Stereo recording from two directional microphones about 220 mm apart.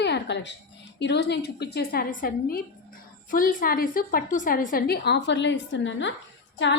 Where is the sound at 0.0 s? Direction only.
50° left (ahead or behind).